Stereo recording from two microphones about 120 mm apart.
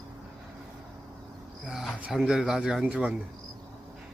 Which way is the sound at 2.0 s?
5° right (ahead or behind).